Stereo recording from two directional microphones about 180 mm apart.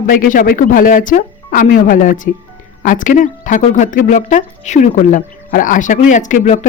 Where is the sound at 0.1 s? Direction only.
50° left (ahead or behind).